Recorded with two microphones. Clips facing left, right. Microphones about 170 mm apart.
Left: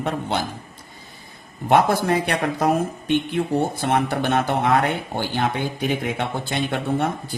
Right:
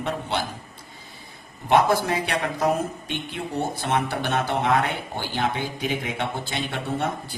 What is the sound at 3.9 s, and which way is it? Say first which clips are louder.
Speech: left 4 dB; 50° left (ahead or behind).